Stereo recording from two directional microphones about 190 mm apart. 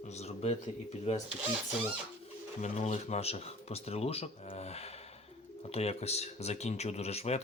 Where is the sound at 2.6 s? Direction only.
35° left (ahead or behind).